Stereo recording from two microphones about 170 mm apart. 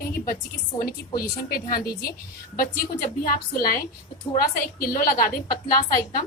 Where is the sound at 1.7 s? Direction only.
60° left (ahead or behind).